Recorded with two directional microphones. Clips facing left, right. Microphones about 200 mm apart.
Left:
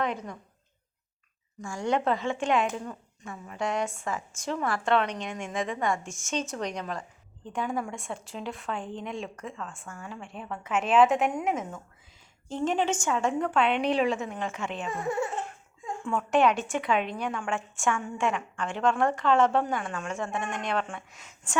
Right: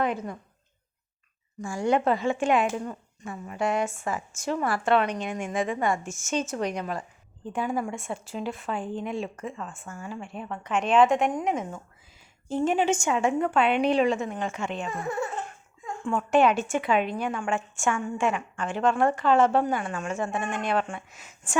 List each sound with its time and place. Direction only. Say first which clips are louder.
0.0 s a woman's voice: right 3 dB; 5° right (ahead or behind)
1.6 s a woman's voice: right 3 dB; 10° right (ahead or behind)
12.5 s a woman's voice: right 3 dB; 10° right (ahead or behind)
13.4 s a woman's voice: right 3 dB; 5° right (ahead or behind)
15.0 s laughter: left 2 dB; 25° left (ahead or behind)
16.0 s a woman's voice: right 2 dB; centre (ahead or behind)